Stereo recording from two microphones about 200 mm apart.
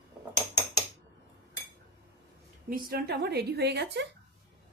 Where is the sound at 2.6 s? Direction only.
45° right (ahead or behind).